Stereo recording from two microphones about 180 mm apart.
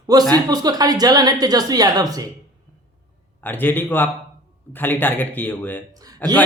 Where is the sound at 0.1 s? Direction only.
20° right (ahead or behind).